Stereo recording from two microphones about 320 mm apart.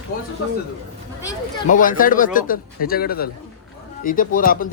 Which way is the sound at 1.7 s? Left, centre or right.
Left.